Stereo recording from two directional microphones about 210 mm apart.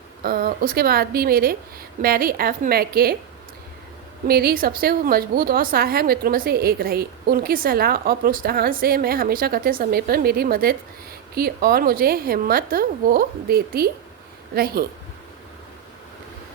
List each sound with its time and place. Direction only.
0.2 s a woman's voice: 45° right (ahead or behind)
4.3 s a woman's voice: 45° right (ahead or behind)